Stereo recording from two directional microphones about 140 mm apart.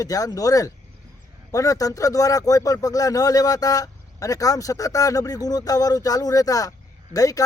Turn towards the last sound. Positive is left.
turn(degrees=25)  # may be behind; listen again after turning